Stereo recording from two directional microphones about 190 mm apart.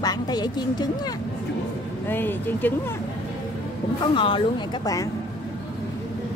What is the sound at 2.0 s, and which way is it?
Speech, 10° left (ahead or behind).